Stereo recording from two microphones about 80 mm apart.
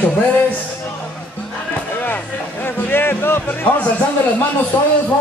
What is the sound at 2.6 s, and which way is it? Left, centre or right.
Speech, left.